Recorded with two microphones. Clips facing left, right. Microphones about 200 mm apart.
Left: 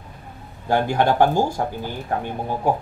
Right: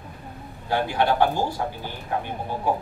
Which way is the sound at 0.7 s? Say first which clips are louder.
Left 3 dB; 45° left (ahead or behind).